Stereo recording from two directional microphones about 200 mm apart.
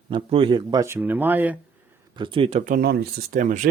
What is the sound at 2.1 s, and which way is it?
Speech, 25° right (ahead or behind).